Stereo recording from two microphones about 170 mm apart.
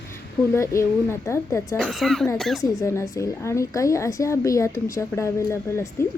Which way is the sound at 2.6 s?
15° left (ahead or behind).